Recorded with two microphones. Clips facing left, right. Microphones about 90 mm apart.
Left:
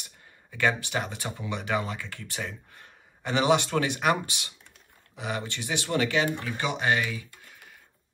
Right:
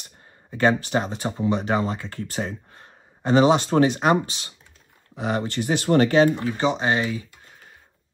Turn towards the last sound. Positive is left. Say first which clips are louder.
# right 4 dB
turn(degrees=-25)  # may be behind; listen again after turning